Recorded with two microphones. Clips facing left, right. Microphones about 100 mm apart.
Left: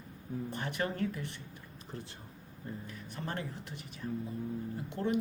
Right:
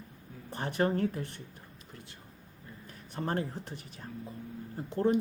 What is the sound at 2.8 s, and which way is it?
Speech, 40° right (ahead or behind).